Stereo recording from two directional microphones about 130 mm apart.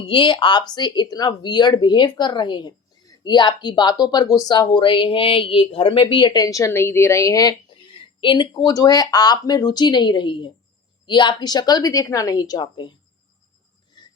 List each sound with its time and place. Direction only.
0.0 s speech: 40° left (ahead or behind)
14.0 s filing: 30° left (ahead or behind)